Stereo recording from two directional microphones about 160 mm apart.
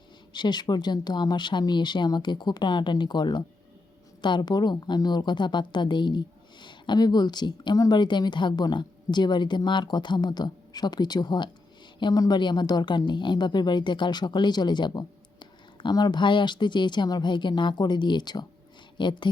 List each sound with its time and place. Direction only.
0.3 s a woman's voice: 25° left (ahead or behind)